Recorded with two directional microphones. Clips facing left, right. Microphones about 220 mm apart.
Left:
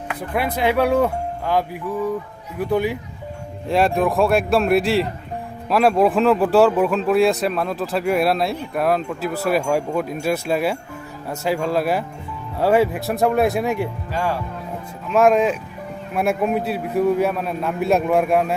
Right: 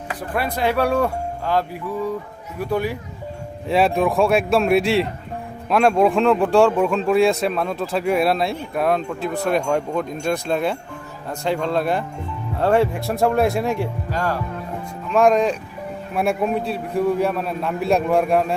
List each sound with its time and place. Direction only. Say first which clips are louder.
0.3 s speech: left 2 dB; 20° left (ahead or behind)
2.6 s speech: left 2 dB; 20° left (ahead or behind)
3.7 s a man's voice: even; centre (ahead or behind)